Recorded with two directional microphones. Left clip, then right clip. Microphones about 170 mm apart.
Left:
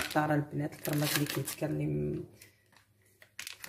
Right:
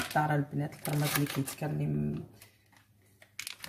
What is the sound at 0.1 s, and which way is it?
Speech, 30° left (ahead or behind).